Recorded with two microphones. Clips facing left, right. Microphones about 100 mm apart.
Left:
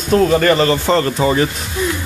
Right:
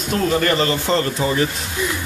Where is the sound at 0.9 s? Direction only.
70° left (ahead or behind).